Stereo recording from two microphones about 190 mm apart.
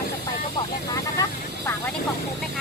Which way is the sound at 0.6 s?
20° left (ahead or behind).